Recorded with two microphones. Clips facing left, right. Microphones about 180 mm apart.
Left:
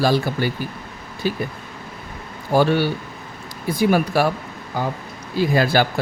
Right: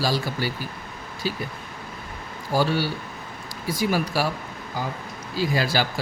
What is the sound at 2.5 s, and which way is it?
Speech, 60° left (ahead or behind).